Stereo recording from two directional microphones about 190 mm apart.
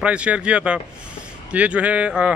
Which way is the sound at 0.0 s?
5° right (ahead or behind).